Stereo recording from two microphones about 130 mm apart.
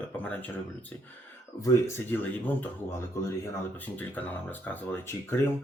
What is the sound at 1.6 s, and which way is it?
Speech, 25° left (ahead or behind).